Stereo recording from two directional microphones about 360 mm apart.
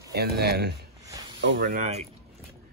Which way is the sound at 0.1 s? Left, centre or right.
Right.